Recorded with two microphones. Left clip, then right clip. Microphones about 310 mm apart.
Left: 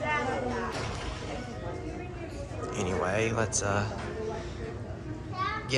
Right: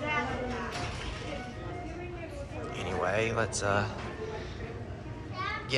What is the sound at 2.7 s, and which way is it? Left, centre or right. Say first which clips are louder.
Music: left 1 dB; centre.